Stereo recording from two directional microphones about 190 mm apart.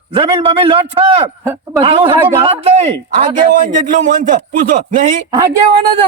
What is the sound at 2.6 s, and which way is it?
A man's voice, 30° right (ahead or behind).